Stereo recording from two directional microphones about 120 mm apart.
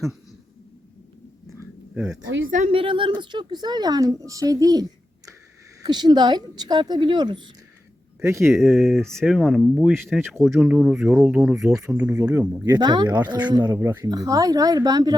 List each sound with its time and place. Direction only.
2.6 s a woman's voice: 45° right (ahead or behind)
8.2 s speech: 25° right (ahead or behind)
8.4 s speech: centre (ahead or behind)
12.8 s a woman's voice: 40° right (ahead or behind)
13.7 s a woman's voice: 25° right (ahead or behind)